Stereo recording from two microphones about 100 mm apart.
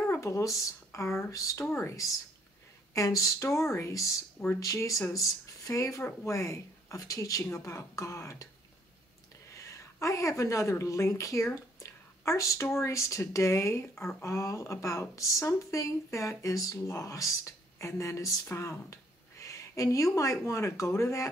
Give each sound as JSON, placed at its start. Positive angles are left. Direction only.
{"t": 0.1, "sound": "speech", "side_deg": 30}
{"t": 9.5, "sound": "a woman's voice", "side_deg": 30}